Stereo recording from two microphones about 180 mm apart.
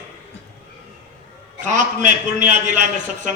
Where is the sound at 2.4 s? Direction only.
45° right (ahead or behind).